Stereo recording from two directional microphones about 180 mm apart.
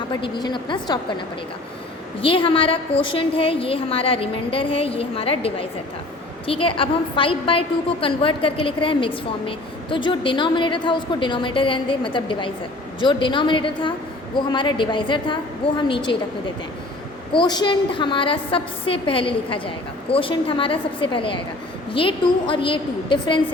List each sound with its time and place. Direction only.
0.1 s a woman's voice: 25° left (ahead or behind)
2.2 s a woman's voice: 30° left (ahead or behind)
17.3 s a woman's voice: 25° left (ahead or behind)